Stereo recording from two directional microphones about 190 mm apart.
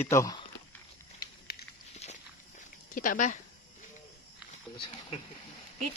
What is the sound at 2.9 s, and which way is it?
Speech, 45° left (ahead or behind).